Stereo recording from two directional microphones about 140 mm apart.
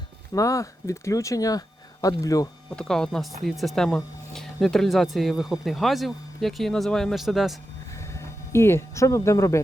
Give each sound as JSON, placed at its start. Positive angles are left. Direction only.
{"t": 0.3, "sound": "speech", "side_deg": 25}
{"t": 2.7, "sound": "speech", "side_deg": 5}
{"t": 7.9, "sound": "a sound", "side_deg": 20}